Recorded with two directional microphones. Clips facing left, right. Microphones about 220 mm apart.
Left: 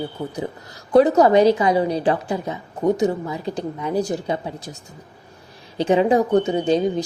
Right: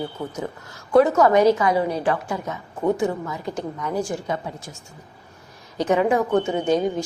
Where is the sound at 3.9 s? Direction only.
35° left (ahead or behind).